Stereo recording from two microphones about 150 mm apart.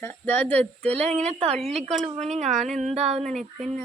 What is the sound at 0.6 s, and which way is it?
Speech, 45° right (ahead or behind).